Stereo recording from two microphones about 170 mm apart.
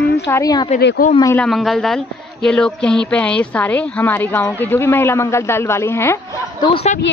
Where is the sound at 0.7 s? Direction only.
65° left (ahead or behind).